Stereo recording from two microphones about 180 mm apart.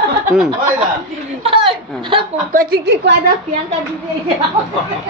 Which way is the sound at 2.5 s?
55° right (ahead or behind).